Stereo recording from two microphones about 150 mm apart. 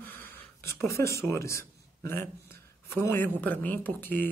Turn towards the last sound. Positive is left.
turn(degrees=10)  # may be behind; listen again after turning